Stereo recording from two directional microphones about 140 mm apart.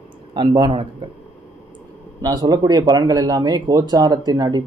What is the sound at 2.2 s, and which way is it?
Speech, 30° right (ahead or behind).